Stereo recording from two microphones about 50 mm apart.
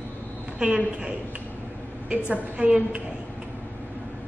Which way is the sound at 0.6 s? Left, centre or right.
Centre.